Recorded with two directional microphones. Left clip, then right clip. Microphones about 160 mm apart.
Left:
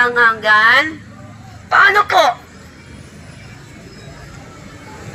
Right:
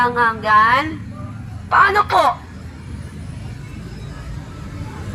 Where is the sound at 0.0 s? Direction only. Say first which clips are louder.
Left 4 dB; 35° left (ahead or behind).